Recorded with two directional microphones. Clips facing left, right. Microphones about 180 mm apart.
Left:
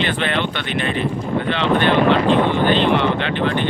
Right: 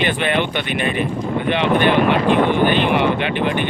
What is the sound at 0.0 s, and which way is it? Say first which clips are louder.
Speech: right 2 dB; 15° right (ahead or behind).